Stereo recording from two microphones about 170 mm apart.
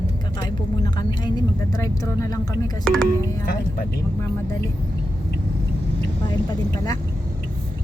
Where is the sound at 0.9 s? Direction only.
25° left (ahead or behind).